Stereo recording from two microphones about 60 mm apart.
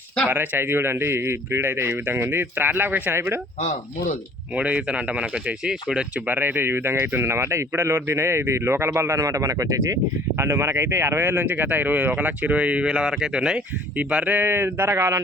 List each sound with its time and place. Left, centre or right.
0.3 s speech: right
4.5 s speech: right
6.1 s speech: right
9.1 s speech: right; by 13.6 s centre
14.3 s speech: right